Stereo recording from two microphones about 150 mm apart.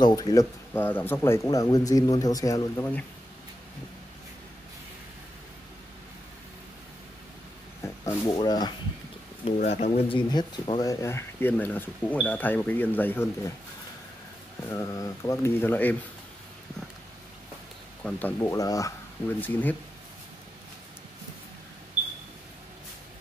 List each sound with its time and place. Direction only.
0.0 s speech: 25° left (ahead or behind)
7.8 s speech: 20° left (ahead or behind)
9.6 s speech: 50° left (ahead or behind)
10.0 s speech: 30° left (ahead or behind); by 13.3 s 10° left (ahead or behind)
14.7 s speech: 20° left (ahead or behind)
18.0 s speech: 15° left (ahead or behind)
19.4 s speech: 10° left (ahead or behind)